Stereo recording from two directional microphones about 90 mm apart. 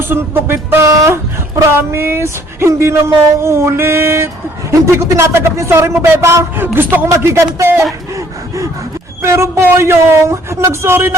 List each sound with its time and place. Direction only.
0.1 s speech: 25° right (ahead or behind)
8.1 s a sound: 35° right (ahead or behind)
9.2 s speech: 30° right (ahead or behind)